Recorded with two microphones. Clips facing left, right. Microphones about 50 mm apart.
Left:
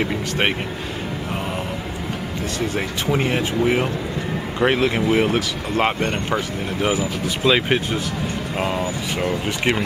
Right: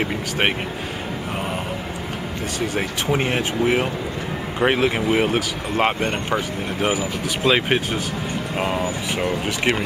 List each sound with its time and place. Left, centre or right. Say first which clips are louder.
2.7 s speech: right 1 dB; centre